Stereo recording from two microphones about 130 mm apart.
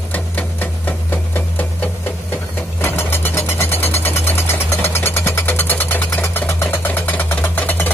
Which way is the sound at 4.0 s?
15° left (ahead or behind).